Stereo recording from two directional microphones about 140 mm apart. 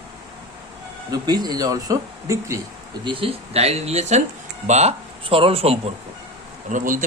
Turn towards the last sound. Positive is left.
turn(degrees=-70)  # may be behind; listen again after turning